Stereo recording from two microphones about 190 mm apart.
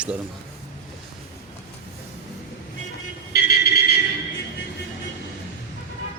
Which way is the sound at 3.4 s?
55° left (ahead or behind).